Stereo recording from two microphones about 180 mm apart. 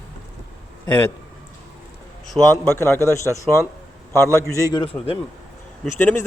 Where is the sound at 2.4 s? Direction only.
5° left (ahead or behind).